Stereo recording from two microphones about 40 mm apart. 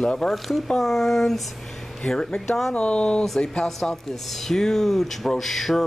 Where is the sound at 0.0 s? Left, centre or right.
Left.